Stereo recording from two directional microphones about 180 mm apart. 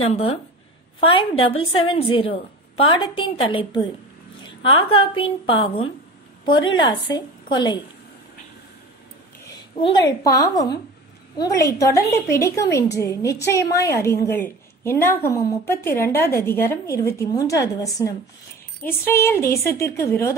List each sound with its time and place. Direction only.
0.0 s a woman's voice: 30° left (ahead or behind)
9.8 s a woman's voice: 25° left (ahead or behind)